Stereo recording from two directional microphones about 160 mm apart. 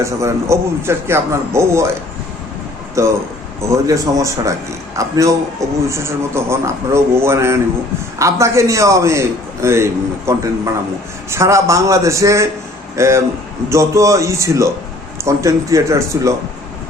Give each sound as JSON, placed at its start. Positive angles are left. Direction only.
{"t": 0.0, "sound": "a man's voice", "side_deg": -20}
{"t": 3.0, "sound": "a man's voice", "side_deg": -20}